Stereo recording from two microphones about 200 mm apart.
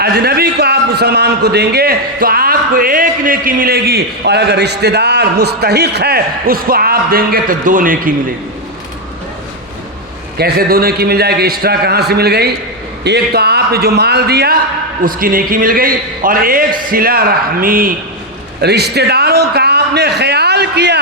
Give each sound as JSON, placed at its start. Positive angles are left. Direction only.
{"t": 0.0, "sound": "a man's voice", "side_deg": -50}
{"t": 10.3, "sound": "a man's voice", "side_deg": -50}
{"t": 18.6, "sound": "a sound", "side_deg": -55}